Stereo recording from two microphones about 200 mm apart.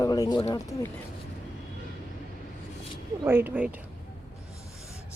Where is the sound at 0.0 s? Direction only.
20° left (ahead or behind).